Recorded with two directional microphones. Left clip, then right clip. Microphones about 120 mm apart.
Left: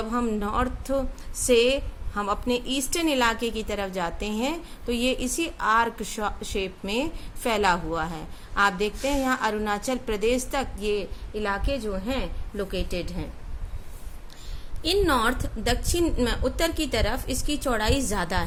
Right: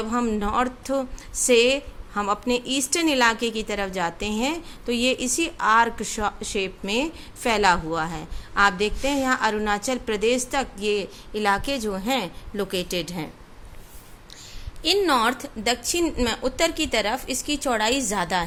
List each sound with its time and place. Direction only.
0.0 s a woman's voice: 30° right (ahead or behind); by 13.2 s 50° right (ahead or behind)
14.8 s a woman's voice: 20° right (ahead or behind)